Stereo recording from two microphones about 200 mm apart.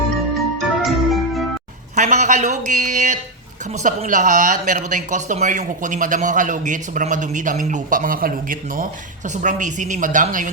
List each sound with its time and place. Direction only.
0.3 s music: centre (ahead or behind)
2.0 s speech: 35° right (ahead or behind)